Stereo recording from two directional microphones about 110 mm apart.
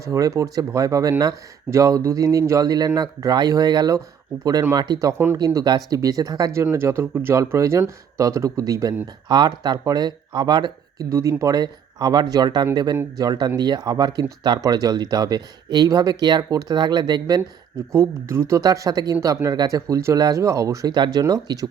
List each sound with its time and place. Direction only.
0.0 s speech: 30° right (ahead or behind)
11.1 s speech: 30° right (ahead or behind)
17.9 s speech: 25° right (ahead or behind)